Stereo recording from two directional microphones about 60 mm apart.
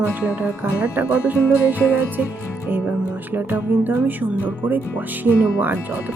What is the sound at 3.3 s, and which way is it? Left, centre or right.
Speech, right.